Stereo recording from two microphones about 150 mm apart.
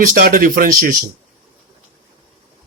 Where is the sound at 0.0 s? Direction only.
70° right (ahead or behind).